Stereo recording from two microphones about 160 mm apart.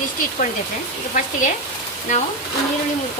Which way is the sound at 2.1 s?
50° left (ahead or behind).